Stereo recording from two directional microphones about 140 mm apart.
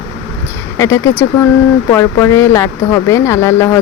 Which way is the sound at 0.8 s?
20° left (ahead or behind).